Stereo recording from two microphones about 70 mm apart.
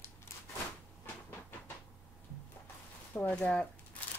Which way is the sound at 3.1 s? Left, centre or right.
Left.